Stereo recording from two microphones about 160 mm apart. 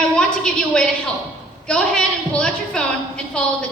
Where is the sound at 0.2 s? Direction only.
5° left (ahead or behind).